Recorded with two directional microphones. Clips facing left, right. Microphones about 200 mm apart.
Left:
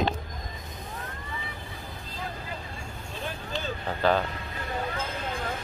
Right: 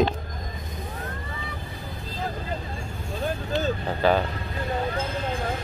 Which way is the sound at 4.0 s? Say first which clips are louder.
Right 2 dB; 5° right (ahead or behind).